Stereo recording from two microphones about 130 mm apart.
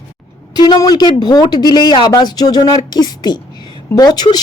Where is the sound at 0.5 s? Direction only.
30° left (ahead or behind).